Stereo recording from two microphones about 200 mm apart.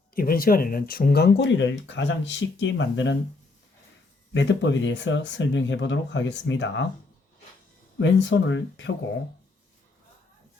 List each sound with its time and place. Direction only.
0.1 s speech: 45° left (ahead or behind); by 3.2 s 65° left (ahead or behind)
4.4 s speech: 65° left (ahead or behind)
7.9 s speech: 65° left (ahead or behind)